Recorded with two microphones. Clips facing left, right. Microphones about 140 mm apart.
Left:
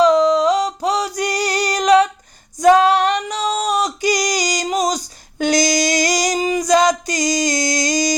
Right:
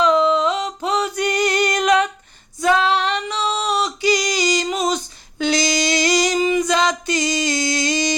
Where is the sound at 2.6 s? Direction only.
45° left (ahead or behind).